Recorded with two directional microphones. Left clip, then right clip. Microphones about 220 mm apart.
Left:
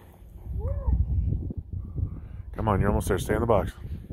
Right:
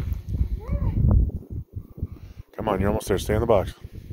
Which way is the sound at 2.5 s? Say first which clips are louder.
Right 2 dB; 30° right (ahead or behind).